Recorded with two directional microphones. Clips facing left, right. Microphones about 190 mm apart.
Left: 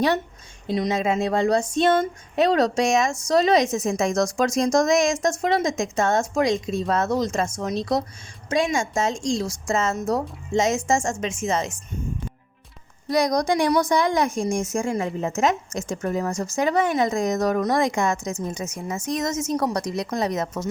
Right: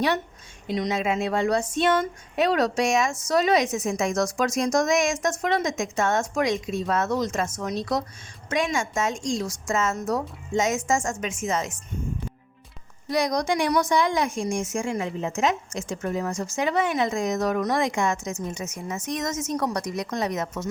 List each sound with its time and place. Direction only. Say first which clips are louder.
0.8 s a woman's voice: left 3 dB; 30° left (ahead or behind)
8.7 s a woman's voice: left 3 dB; 30° left (ahead or behind)
13.1 s a woman's voice: left 3 dB; 40° left (ahead or behind)